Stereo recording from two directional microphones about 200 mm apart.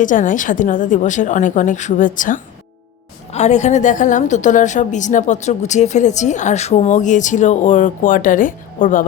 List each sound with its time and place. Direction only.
0.0 s a woman's voice: 40° left (ahead or behind)